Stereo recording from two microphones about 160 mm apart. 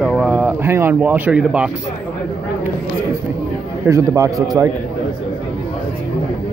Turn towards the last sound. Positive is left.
turn(degrees=-20)  # may be behind; listen again after turning